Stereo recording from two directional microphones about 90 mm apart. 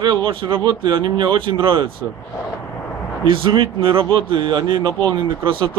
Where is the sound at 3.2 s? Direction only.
70° right (ahead or behind).